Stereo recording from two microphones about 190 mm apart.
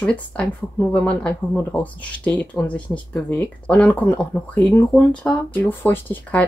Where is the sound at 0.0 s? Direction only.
5° left (ahead or behind).